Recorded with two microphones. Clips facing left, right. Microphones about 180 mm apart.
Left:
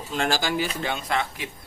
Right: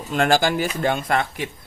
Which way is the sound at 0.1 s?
55° right (ahead or behind).